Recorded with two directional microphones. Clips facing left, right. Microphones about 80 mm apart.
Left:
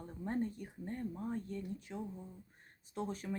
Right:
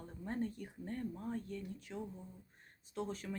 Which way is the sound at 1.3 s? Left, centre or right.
Left.